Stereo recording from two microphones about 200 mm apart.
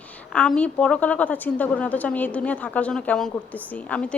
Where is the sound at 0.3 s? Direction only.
5° left (ahead or behind).